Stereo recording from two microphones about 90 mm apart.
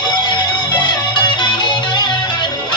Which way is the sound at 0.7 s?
55° left (ahead or behind).